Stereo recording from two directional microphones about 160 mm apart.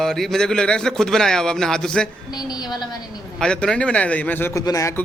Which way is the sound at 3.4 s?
5° left (ahead or behind).